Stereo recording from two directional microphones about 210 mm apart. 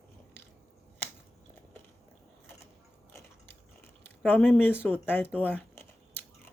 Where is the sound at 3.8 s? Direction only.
10° left (ahead or behind).